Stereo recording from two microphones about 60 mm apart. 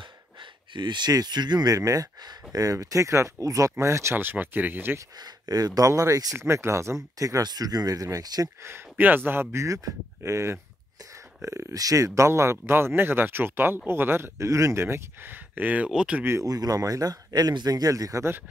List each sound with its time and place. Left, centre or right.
1.1 s speech: right
3.8 s speech: right
4.2 s speech: right
5.5 s speech: right
5.9 s speech: right
6.3 s speech: right
8.6 s speech: right
11.8 s speech: right
12.3 s speech: right
15.2 s speech: right
15.9 s speech: centre
16.4 s speech: right